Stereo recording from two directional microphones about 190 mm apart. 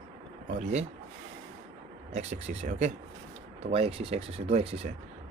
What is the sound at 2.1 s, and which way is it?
Speech, 35° right (ahead or behind).